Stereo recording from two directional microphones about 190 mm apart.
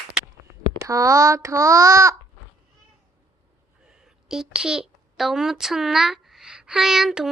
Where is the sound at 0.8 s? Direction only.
15° right (ahead or behind).